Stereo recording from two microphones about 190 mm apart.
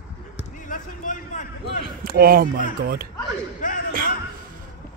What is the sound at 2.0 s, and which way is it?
Speech, 50° right (ahead or behind).